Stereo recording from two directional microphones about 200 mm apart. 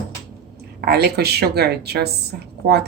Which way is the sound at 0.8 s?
50° right (ahead or behind).